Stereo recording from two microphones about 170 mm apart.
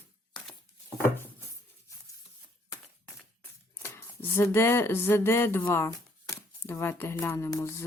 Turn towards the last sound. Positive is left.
turn(degrees=15)  # may be behind; listen again after turning